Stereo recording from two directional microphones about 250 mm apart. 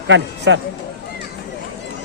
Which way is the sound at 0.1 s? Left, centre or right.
Right.